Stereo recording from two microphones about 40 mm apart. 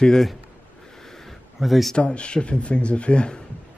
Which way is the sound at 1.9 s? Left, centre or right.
Left.